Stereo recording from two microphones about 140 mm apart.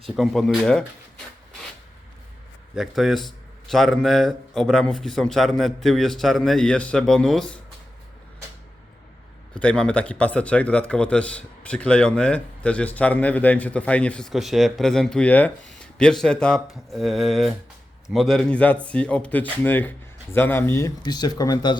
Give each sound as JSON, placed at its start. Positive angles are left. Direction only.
{"t": 0.0, "sound": "a man's voice", "side_deg": 0}
{"t": 2.7, "sound": "a man's voice", "side_deg": 0}
{"t": 9.6, "sound": "a man's voice", "side_deg": 5}
{"t": 21.0, "sound": "speech", "side_deg": 30}